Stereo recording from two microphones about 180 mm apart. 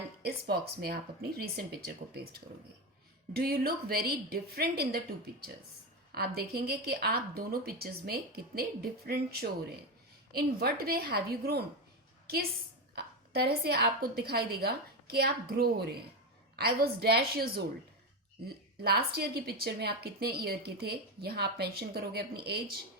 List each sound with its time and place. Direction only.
0.2 s a woman's voice: 60° right (ahead or behind)
3.3 s a woman's voice: 55° right (ahead or behind)
13.0 s a woman's voice: 60° right (ahead or behind)